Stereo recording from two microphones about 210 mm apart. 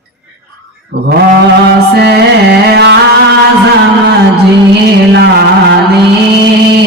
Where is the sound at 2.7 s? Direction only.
55° right (ahead or behind).